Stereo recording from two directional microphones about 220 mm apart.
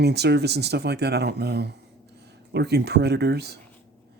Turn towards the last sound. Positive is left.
turn(degrees=-50)  # may be behind; listen again after turning